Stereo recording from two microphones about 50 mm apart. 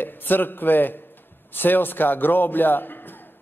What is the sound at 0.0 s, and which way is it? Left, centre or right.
A man's voice, left.